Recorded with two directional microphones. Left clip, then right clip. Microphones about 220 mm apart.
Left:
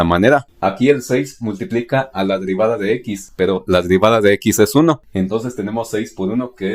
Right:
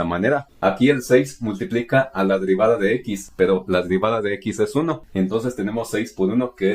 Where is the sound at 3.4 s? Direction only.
40° left (ahead or behind).